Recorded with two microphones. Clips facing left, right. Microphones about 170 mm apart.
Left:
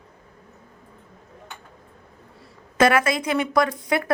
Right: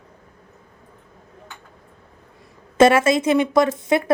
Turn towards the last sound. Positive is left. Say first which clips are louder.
# right 4 dB
turn(degrees=-20)  # may be behind; listen again after turning